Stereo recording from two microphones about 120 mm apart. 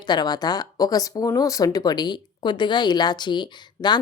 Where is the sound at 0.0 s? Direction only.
35° left (ahead or behind).